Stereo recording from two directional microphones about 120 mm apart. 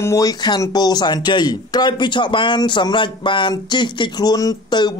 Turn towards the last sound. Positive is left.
turn(degrees=35)  # may be behind; listen again after turning